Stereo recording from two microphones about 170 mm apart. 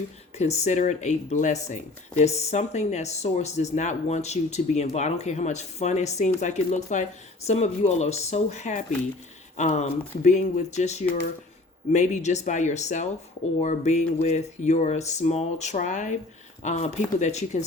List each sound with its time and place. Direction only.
0.3 s speech: 40° left (ahead or behind)